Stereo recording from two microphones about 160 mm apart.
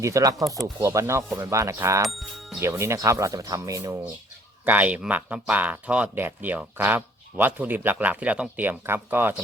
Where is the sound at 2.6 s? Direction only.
15° right (ahead or behind).